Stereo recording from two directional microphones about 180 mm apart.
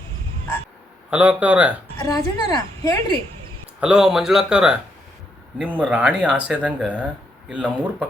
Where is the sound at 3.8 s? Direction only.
5° right (ahead or behind).